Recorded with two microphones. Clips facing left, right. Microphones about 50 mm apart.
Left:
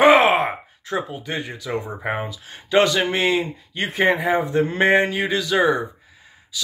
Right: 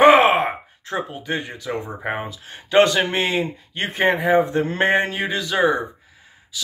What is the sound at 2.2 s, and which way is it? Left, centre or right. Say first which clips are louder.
Speech: even; right.